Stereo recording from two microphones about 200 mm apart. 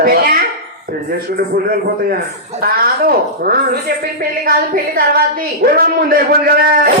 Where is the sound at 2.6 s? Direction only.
50° right (ahead or behind).